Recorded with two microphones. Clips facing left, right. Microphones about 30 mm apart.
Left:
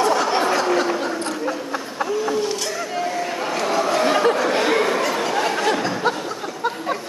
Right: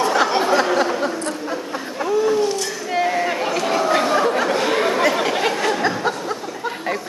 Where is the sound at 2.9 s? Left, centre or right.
Right.